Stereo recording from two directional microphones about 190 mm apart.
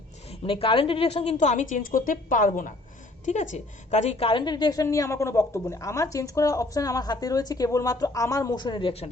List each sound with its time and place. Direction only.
0.3 s a woman's voice: 30° left (ahead or behind)